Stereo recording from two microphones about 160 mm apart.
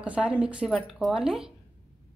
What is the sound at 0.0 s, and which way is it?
Speech, 10° right (ahead or behind).